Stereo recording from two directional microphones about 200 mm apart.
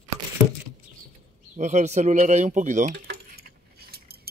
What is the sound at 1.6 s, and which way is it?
Speech, 35° right (ahead or behind).